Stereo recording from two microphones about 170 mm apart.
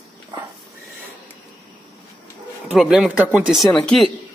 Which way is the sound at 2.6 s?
5° right (ahead or behind).